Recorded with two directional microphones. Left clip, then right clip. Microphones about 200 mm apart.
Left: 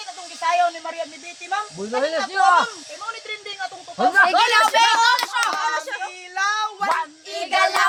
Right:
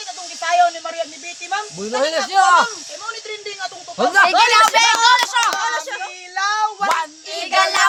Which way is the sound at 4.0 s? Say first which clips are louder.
Right 2 dB; 50° right (ahead or behind).